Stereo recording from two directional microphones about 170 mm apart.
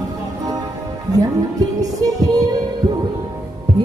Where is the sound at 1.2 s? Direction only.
20° right (ahead or behind).